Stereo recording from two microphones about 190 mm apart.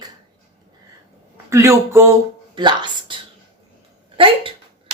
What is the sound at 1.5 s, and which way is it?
Speech, 15° right (ahead or behind).